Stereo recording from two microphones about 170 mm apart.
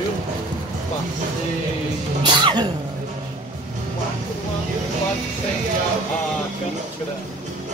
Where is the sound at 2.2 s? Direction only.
25° right (ahead or behind).